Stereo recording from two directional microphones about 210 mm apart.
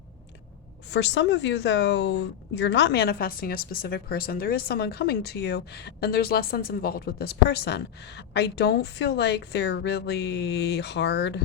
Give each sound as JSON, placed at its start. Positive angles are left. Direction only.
{"t": 0.9, "sound": "a woman's voice", "side_deg": 55}